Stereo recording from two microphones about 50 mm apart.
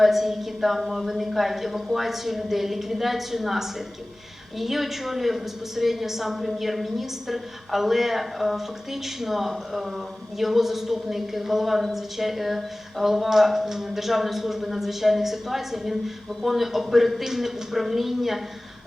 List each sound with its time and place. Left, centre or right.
0.0 s a woman's voice: centre